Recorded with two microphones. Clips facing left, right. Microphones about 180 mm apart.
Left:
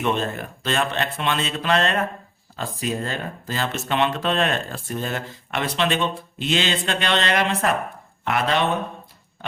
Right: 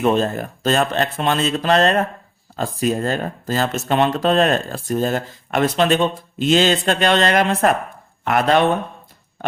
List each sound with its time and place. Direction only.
0.0 s speech: 40° right (ahead or behind)